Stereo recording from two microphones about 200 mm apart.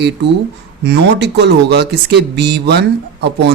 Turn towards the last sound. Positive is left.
turn(degrees=-55)  # may be behind; listen again after turning